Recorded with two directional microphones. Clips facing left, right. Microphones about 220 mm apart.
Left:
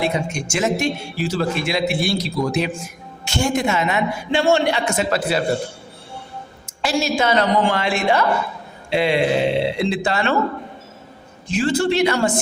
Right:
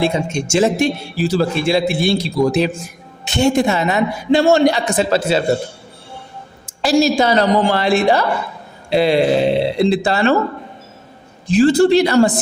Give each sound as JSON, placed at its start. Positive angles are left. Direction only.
{"t": 0.0, "sound": "a man's voice", "side_deg": -25}
{"t": 3.2, "sound": "a man's voice", "side_deg": -20}
{"t": 3.5, "sound": "a man's voice", "side_deg": -35}
{"t": 6.7, "sound": "a man's voice", "side_deg": -35}
{"t": 11.4, "sound": "a man's voice", "side_deg": -35}